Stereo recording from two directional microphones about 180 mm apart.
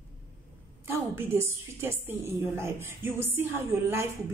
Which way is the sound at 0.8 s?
15° right (ahead or behind).